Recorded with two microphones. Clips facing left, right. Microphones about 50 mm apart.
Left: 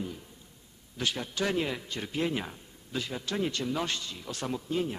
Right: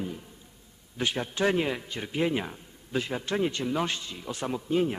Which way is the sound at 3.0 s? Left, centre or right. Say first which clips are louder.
Right 4 dB; right.